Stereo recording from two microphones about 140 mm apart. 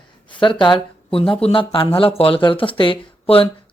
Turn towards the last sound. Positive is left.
turn(degrees=40)  # may be behind; listen again after turning